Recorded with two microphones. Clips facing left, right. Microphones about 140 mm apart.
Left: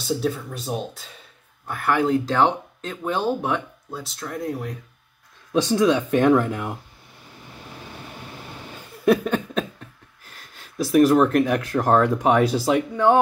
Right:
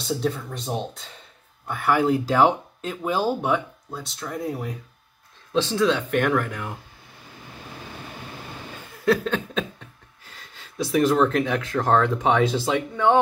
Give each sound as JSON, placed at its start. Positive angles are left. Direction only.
{"t": 0.2, "sound": "speech", "side_deg": 5}
{"t": 5.5, "sound": "speech", "side_deg": 15}
{"t": 9.0, "sound": "a sound", "side_deg": 15}
{"t": 10.3, "sound": "speech", "side_deg": 5}